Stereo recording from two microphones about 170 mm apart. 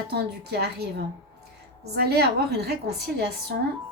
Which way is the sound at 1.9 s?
70° right (ahead or behind).